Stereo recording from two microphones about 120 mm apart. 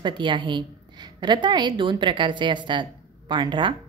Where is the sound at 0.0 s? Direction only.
40° right (ahead or behind).